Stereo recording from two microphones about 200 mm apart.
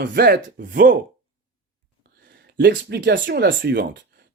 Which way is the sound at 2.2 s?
60° right (ahead or behind).